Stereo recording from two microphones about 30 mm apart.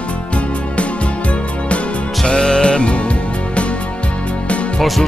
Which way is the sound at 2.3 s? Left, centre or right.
Left.